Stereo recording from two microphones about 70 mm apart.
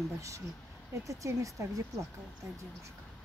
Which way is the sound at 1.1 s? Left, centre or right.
Right.